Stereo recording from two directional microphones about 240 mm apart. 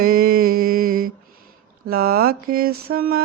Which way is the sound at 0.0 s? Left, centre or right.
Right.